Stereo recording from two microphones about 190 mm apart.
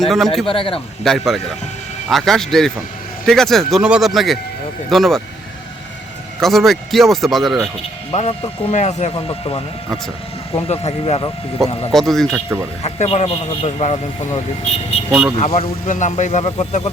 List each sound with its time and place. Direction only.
0.0 s speech: centre (ahead or behind)
0.4 s a man's voice: 30° left (ahead or behind)
1.0 s speech: centre (ahead or behind)
6.4 s speech: centre (ahead or behind)
8.1 s speech: 30° left (ahead or behind)
11.9 s speech: centre (ahead or behind)
12.8 s speech: 35° left (ahead or behind)
14.9 s vehicle: 30° left (ahead or behind)
15.4 s speech: 30° left (ahead or behind)